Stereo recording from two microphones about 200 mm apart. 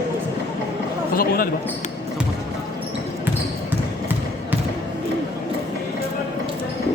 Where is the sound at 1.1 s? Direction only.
45° left (ahead or behind).